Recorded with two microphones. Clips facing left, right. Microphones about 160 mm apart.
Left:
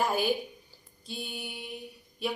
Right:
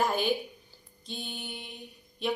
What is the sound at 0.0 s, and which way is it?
A woman's voice, 5° left (ahead or behind).